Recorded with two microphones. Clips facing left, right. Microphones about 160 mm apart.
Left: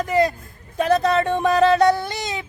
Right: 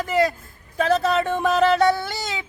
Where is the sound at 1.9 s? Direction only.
20° left (ahead or behind).